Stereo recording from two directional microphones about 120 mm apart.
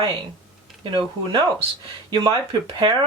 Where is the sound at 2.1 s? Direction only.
30° right (ahead or behind).